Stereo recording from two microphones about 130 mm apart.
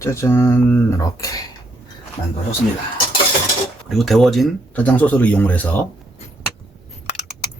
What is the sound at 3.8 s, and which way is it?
Speech, centre (ahead or behind).